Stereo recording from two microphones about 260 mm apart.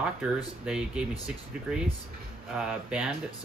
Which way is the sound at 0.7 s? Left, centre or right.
Centre.